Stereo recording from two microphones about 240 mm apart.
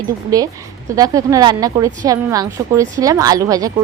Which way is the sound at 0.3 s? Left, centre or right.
Centre.